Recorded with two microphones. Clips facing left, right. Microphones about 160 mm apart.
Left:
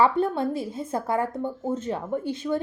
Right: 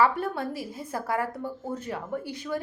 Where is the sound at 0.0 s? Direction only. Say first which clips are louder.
Left 3 dB; 25° left (ahead or behind).